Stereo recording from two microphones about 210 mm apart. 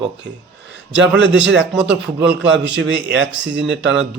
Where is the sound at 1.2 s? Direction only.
60° right (ahead or behind).